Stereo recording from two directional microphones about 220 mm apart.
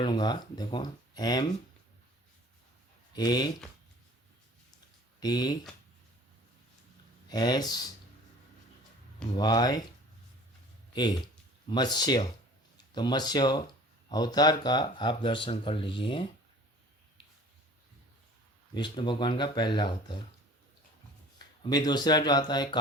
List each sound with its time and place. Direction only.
0.0 s speech: 20° left (ahead or behind)
3.2 s speech: 20° left (ahead or behind)
5.2 s speech: 20° left (ahead or behind)
7.3 s speech: 20° left (ahead or behind)
9.3 s speech: 20° left (ahead or behind)
10.9 s speech: 20° left (ahead or behind)
18.7 s speech: 20° left (ahead or behind)
21.3 s speech: 20° left (ahead or behind)